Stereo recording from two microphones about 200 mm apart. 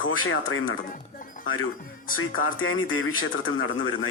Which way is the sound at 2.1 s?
85° left.